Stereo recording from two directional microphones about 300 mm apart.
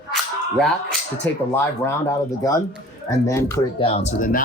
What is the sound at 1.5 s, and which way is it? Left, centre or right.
Speech, centre.